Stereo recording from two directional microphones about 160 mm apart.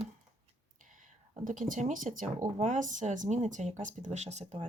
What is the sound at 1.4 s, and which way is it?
Speech, 55° right (ahead or behind).